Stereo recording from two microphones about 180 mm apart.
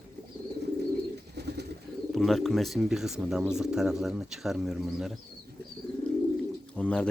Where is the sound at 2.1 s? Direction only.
Centre (ahead or behind).